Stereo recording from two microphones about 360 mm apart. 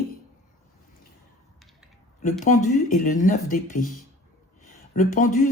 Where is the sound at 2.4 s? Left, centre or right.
Centre.